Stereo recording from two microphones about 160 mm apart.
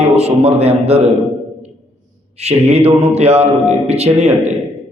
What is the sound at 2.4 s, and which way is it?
A man's voice, 40° right (ahead or behind).